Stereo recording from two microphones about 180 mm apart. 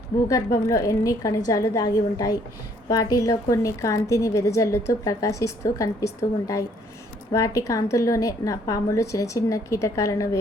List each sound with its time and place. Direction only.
0.3 s a woman's voice: 20° left (ahead or behind)
7.3 s a woman's voice: 15° left (ahead or behind)